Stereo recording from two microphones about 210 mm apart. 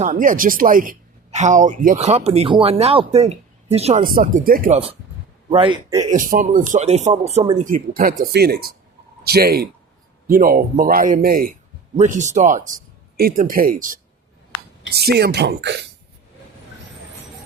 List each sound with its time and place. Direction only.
0.0 s speech: 35° right (ahead or behind)
4.0 s speech: 40° right (ahead or behind)
5.5 s a man's voice: 20° right (ahead or behind)
6.1 s speech: 40° right (ahead or behind)
7.6 s speech: 40° right (ahead or behind)
14.9 s speech: 50° right (ahead or behind)